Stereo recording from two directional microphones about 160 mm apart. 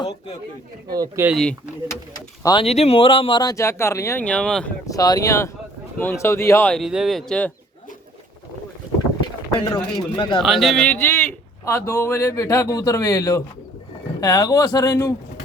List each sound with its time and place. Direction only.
0.9 s speech: 20° right (ahead or behind)
1.3 s speech: 5° left (ahead or behind)
1.9 s speech: 20° left (ahead or behind)
2.6 s a man's voice: 40° left (ahead or behind); by 4.7 s 5° left (ahead or behind)
4.9 s a man's voice: 25° left (ahead or behind)
6.7 s speech: centre (ahead or behind)
9.6 s speech: 30° left (ahead or behind)
10.4 s a man's voice: centre (ahead or behind); by 15.1 s 20° left (ahead or behind)